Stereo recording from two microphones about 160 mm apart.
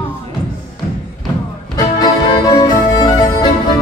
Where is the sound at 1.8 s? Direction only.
25° left (ahead or behind).